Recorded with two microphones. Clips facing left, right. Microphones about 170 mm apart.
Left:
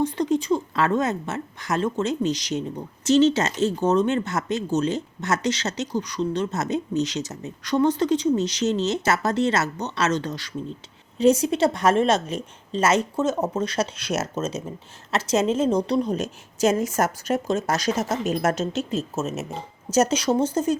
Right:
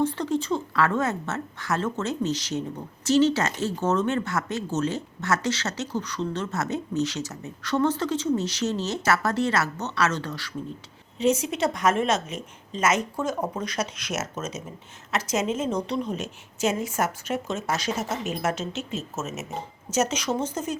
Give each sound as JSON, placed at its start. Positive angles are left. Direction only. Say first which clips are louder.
{"t": 0.0, "sound": "a woman's voice", "louder": "left 3 dB", "side_deg": 15}
{"t": 11.2, "sound": "a woman's voice", "louder": "left 5 dB", "side_deg": 35}